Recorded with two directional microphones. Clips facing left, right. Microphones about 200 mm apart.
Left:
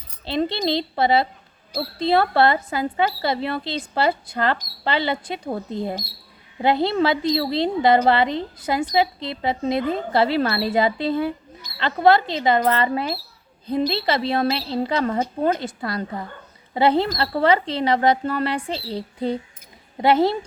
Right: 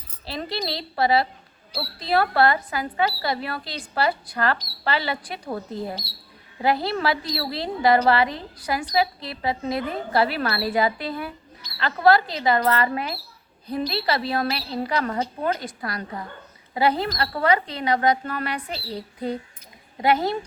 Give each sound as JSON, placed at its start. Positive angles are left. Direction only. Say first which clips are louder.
{"t": 0.3, "sound": "a woman's voice", "louder": "left 7 dB", "side_deg": 25}